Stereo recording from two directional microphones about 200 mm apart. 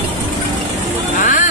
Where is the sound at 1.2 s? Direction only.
40° left (ahead or behind).